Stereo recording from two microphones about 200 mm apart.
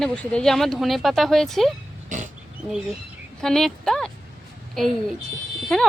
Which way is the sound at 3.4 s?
Centre (ahead or behind).